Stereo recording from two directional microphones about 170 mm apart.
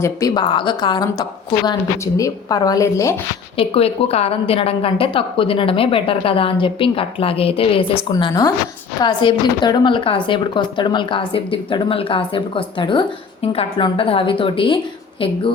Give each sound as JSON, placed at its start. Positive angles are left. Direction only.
{"t": 0.0, "sound": "a woman's voice", "side_deg": 20}
{"t": 3.6, "sound": "a woman's voice", "side_deg": 35}
{"t": 8.1, "sound": "a woman's voice", "side_deg": 20}